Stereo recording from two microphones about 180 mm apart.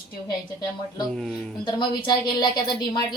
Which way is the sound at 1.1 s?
5° left (ahead or behind).